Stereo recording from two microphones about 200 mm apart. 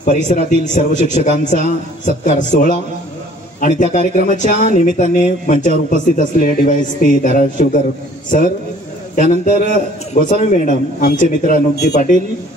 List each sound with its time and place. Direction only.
0.0 s speech: 40° left (ahead or behind)
3.8 s speech: 40° left (ahead or behind)